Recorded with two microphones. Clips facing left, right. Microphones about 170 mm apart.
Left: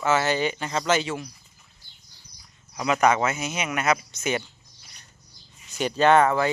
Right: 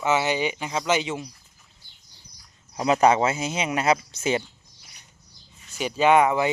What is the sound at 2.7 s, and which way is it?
Speech, 30° right (ahead or behind).